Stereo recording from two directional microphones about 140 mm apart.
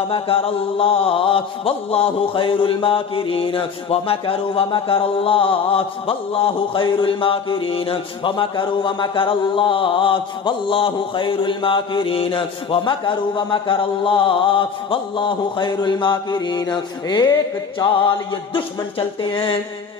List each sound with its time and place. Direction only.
0.1 s mantra: 40° left (ahead or behind)